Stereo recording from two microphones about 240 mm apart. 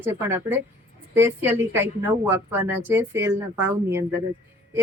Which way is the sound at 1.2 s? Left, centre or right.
Centre.